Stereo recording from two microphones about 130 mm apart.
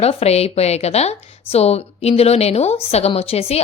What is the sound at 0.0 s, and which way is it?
A woman's voice, 50° left (ahead or behind).